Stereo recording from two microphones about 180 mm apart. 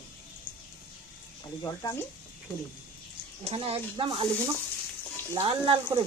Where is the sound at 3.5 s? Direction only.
30° right (ahead or behind).